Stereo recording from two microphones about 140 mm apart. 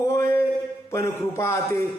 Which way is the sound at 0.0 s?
20° left (ahead or behind).